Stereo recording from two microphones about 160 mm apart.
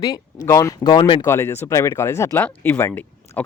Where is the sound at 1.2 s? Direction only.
15° left (ahead or behind).